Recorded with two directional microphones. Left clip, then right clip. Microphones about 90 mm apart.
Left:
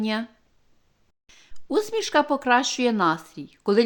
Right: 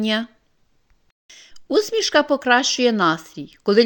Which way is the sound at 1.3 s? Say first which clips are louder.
Right 5 dB; 20° right (ahead or behind).